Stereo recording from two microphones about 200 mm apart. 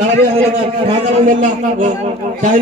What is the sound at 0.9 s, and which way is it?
Speech, 40° right (ahead or behind).